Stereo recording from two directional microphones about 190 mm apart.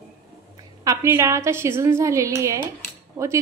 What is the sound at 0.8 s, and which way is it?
Speech, 15° right (ahead or behind).